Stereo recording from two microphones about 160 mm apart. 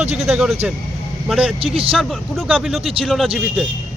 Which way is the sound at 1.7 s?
35° right (ahead or behind).